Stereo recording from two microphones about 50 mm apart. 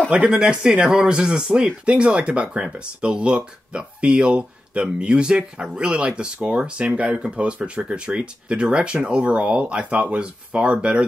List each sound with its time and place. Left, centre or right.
0.1 s speech: centre